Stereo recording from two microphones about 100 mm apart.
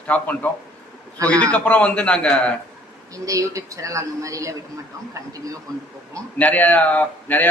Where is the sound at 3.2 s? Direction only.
35° right (ahead or behind).